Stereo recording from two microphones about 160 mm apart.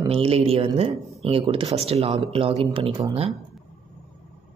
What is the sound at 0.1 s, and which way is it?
Speech, 40° right (ahead or behind).